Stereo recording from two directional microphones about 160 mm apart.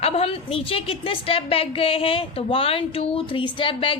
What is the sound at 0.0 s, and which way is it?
A woman's voice, 35° left (ahead or behind).